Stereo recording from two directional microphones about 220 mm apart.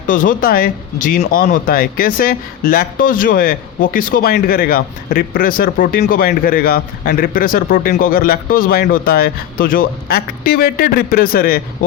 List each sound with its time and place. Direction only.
0.1 s speech: 40° left (ahead or behind)